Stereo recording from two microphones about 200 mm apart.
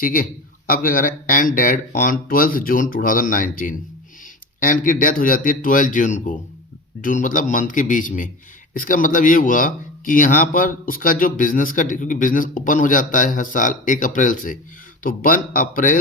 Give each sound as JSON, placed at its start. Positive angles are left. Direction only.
{"t": 0.0, "sound": "speech", "side_deg": 45}